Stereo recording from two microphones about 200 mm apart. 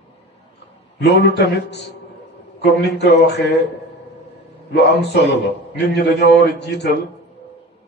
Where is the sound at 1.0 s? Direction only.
55° left (ahead or behind).